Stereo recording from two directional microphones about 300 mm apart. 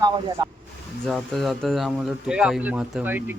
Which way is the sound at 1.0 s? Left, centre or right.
Centre.